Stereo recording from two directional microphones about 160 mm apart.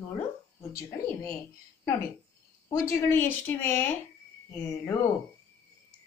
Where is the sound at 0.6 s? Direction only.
15° left (ahead or behind).